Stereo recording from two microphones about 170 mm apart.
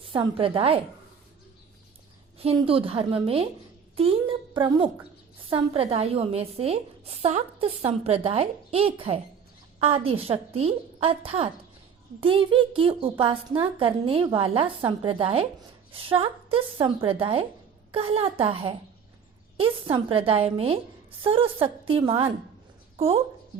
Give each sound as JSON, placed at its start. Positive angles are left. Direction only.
{"t": 0.2, "sound": "a woman's voice", "side_deg": -30}
{"t": 2.4, "sound": "a woman's voice", "side_deg": -35}